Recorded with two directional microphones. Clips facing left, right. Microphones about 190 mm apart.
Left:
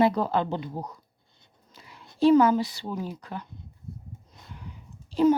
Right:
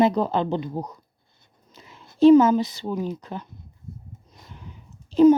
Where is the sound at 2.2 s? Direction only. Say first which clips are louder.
Right 5 dB; 20° right (ahead or behind).